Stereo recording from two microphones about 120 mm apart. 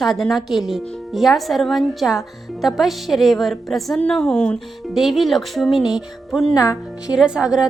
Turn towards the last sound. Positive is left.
turn(degrees=-5)  # may be behind; listen again after turning